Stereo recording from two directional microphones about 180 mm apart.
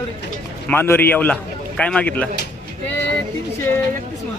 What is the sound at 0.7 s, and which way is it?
A man's voice, 10° left (ahead or behind).